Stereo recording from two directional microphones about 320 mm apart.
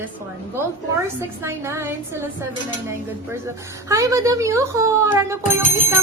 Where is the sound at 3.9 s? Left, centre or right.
Centre.